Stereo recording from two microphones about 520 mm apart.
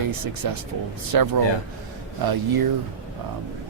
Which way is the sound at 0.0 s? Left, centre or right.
Right.